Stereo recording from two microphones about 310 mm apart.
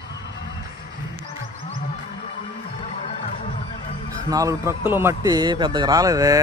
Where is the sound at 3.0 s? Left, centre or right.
Left.